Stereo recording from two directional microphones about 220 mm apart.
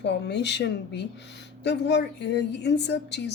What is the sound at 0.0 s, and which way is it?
Speech, 50° left (ahead or behind).